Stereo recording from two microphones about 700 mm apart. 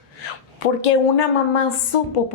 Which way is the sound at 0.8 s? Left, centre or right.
Left.